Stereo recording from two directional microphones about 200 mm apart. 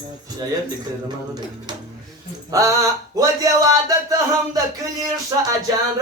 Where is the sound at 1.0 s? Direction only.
20° right (ahead or behind).